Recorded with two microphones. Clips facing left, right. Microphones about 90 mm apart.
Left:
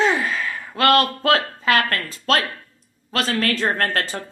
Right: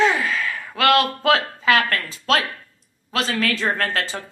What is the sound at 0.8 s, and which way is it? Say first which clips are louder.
Speech: even; 40° left (ahead or behind).